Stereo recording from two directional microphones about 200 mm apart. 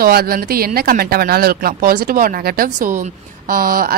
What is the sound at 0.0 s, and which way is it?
A woman's voice, 50° right (ahead or behind).